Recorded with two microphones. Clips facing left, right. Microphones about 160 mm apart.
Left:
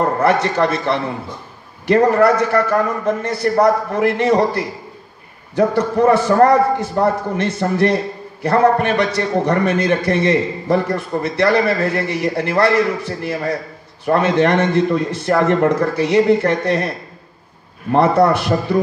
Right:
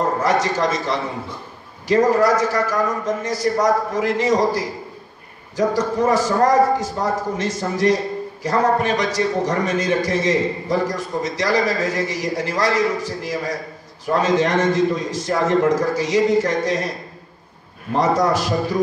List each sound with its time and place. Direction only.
0.0 s a man's voice: 60° left (ahead or behind)
17.9 s a man's voice: 60° left (ahead or behind)